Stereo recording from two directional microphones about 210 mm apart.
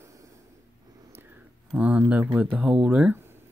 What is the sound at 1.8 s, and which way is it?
Speech, 5° right (ahead or behind).